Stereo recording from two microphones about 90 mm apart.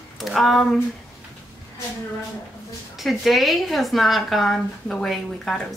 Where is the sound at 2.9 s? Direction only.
Centre (ahead or behind).